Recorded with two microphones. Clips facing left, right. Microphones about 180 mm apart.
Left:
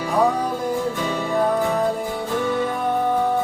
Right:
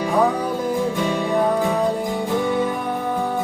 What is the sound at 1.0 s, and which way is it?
Music, 15° right (ahead or behind).